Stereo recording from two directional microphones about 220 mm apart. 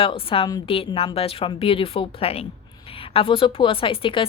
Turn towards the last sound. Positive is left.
turn(degrees=25)  # may be behind; listen again after turning